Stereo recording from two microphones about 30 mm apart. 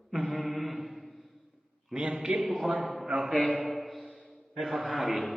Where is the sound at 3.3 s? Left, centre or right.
Left.